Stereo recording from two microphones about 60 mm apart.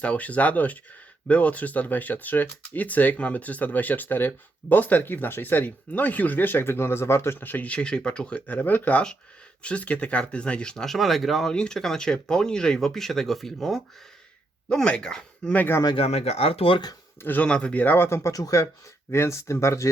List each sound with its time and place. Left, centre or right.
0.0 s speech: left
7.3 s speech: left; by 10.8 s centre
10.8 s speech: centre
11.5 s speech: centre
14.7 s speech: centre
15.4 s speech: left
17.4 s speech: centre
17.8 s speech: left
18.3 s speech: left
19.1 s speech: left